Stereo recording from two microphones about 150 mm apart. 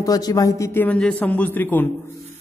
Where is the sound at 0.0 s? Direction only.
25° left (ahead or behind).